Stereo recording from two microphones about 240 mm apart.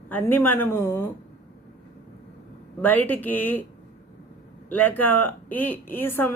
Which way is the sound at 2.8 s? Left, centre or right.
Centre.